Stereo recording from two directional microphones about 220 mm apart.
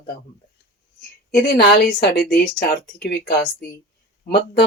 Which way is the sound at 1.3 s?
45° left (ahead or behind).